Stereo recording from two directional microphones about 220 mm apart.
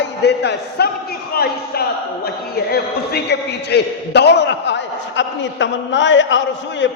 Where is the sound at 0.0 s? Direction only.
50° left (ahead or behind).